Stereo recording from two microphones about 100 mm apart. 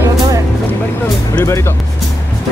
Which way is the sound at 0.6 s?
20° left (ahead or behind).